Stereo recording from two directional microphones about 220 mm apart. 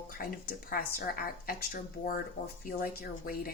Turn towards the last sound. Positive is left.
turn(degrees=40)  # may be behind; listen again after turning